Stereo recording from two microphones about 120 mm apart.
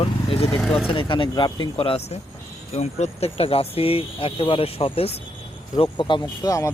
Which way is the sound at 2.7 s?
65° left (ahead or behind).